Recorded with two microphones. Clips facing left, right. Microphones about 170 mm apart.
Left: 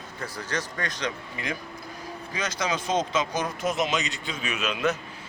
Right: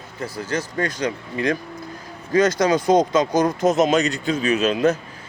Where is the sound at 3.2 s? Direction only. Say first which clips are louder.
Right 10 dB; 45° right (ahead or behind).